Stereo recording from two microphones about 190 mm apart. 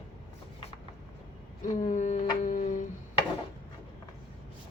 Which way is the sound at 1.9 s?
40° left (ahead or behind).